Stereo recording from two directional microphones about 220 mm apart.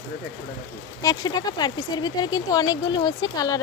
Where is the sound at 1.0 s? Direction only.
20° left (ahead or behind).